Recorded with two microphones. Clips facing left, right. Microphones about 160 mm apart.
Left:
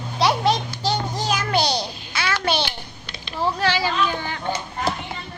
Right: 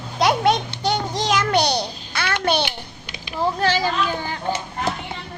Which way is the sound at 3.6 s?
45° right (ahead or behind).